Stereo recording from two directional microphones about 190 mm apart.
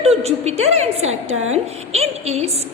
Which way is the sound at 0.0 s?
35° right (ahead or behind).